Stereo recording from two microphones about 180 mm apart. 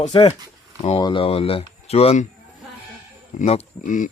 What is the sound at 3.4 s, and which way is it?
Speech, 40° left (ahead or behind).